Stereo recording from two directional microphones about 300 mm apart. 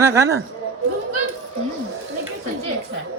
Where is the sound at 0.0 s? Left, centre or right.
Centre.